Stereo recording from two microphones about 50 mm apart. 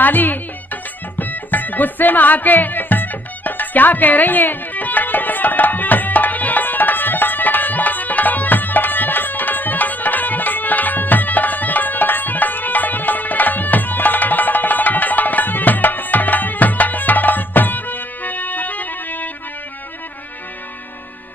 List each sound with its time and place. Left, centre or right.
0.0 s speech: left
1.2 s music: left